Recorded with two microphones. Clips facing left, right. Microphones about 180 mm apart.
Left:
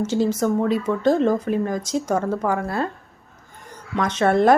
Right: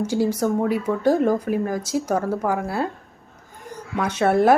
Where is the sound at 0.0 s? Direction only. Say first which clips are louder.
Left 1 dB; 10° right (ahead or behind).